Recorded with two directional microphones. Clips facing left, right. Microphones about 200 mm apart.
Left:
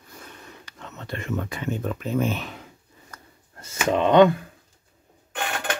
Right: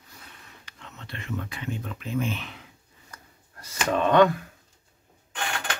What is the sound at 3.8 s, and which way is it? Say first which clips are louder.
Speech: left 3 dB; 20° left (ahead or behind).